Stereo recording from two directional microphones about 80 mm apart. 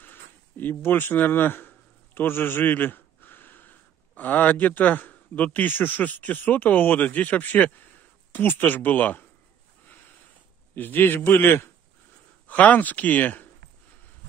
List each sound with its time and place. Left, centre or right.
0.0 s speech: left
10.7 s a man's voice: left